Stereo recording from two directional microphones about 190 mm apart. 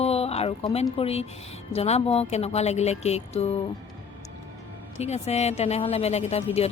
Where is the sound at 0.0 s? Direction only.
35° left (ahead or behind).